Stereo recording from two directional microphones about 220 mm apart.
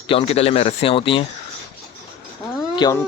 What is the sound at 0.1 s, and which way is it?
Speech, 25° left (ahead or behind).